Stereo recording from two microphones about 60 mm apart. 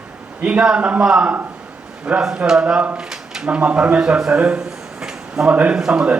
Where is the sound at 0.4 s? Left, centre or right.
Centre.